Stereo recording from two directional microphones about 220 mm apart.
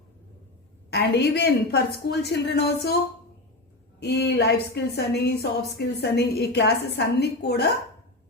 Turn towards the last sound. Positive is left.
turn(degrees=50)  # may be behind; listen again after turning